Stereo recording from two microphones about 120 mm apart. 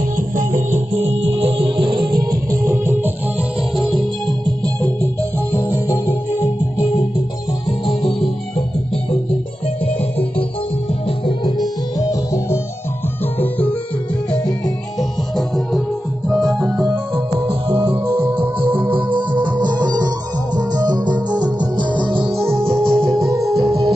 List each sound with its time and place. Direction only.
0.4 s music: 90° right; by 2.2 s 40° right (ahead or behind)
2.6 s music: 20° right (ahead or behind)
3.7 s music: centre (ahead or behind)
9.8 s music: 55° left (ahead or behind)
11.1 s music: 40° left (ahead or behind)
13.4 s music: 15° left (ahead or behind)
15.0 s music: centre (ahead or behind)
16.7 s music: 10° right (ahead or behind)
17.4 s music: 55° right (ahead or behind)
18.1 s music: 15° right (ahead or behind)
19.6 s music: 40° right (ahead or behind)